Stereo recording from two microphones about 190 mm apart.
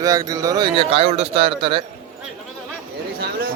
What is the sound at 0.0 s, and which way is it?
A man's voice, 20° right (ahead or behind).